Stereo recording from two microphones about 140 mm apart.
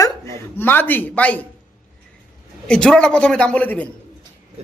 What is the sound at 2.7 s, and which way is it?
A man's voice, 5° left (ahead or behind).